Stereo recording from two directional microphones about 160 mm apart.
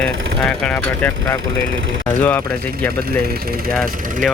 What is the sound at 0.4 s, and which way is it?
Speech, 5° left (ahead or behind).